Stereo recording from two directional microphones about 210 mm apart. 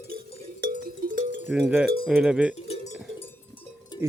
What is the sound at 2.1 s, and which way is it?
Speech, 5° right (ahead or behind).